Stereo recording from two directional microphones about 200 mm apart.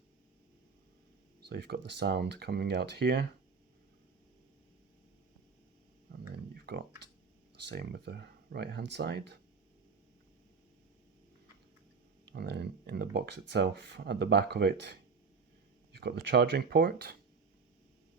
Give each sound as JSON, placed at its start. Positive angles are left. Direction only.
{"t": 1.5, "sound": "speech", "side_deg": -55}
{"t": 6.3, "sound": "a sound", "side_deg": -55}
{"t": 7.6, "sound": "speech", "side_deg": -55}
{"t": 12.3, "sound": "speech", "side_deg": -55}
{"t": 16.0, "sound": "speech", "side_deg": -55}